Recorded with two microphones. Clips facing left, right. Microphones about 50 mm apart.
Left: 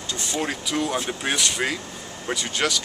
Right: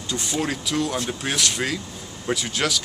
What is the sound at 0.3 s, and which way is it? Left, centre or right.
Speech, centre.